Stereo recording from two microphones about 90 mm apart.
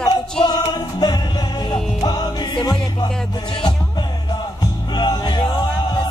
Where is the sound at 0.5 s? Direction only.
50° left (ahead or behind).